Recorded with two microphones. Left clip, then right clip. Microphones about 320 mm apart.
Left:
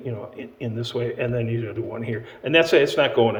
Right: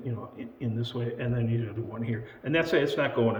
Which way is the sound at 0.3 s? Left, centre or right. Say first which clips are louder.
Left 5 dB; centre.